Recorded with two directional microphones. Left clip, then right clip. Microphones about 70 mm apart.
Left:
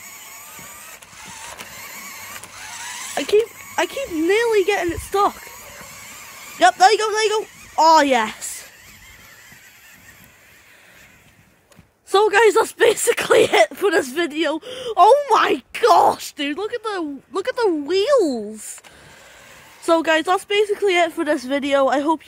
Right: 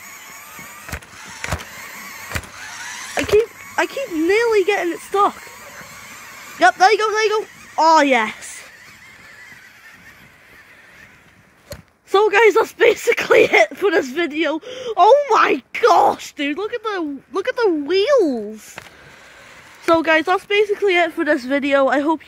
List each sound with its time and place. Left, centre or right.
0.0 s vehicle: centre
3.3 s a sound: centre
3.7 s speech: left
4.0 s speech: centre
4.3 s speech: left
5.3 s honk: centre
6.8 s speech: centre
12.1 s speech: left
19.8 s speech: left
21.3 s speech: centre